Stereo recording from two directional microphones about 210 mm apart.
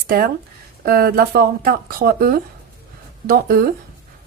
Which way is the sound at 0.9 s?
45° right (ahead or behind).